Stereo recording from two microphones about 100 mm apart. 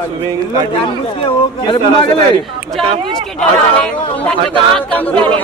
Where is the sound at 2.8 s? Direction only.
75° right (ahead or behind).